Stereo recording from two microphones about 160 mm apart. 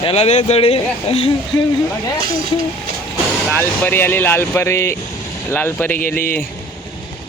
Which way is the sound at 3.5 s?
10° left (ahead or behind).